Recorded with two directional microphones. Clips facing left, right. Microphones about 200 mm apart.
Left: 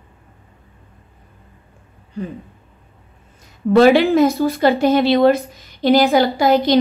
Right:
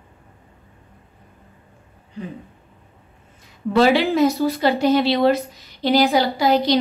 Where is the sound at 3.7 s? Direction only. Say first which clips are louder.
Left 5 dB; 50° left (ahead or behind).